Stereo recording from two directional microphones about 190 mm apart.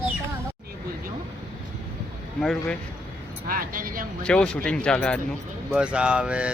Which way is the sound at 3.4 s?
50° right (ahead or behind).